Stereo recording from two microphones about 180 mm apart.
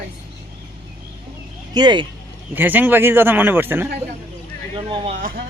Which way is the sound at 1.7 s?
25° right (ahead or behind).